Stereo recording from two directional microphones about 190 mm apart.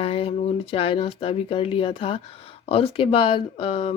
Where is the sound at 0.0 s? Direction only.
30° left (ahead or behind).